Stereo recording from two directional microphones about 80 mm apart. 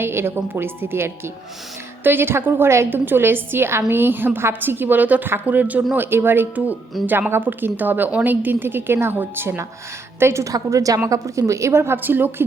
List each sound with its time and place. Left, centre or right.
0.0 s a woman's voice: right